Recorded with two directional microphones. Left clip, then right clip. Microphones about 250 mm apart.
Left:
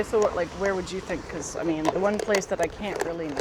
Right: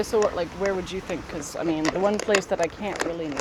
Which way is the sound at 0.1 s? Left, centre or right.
Centre.